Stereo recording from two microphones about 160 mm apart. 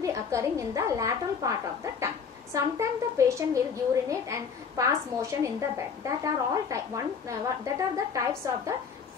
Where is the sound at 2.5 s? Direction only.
20° right (ahead or behind).